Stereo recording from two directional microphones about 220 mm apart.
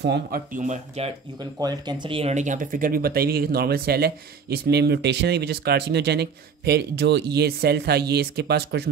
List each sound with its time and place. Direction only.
0.0 s speech: 45° right (ahead or behind)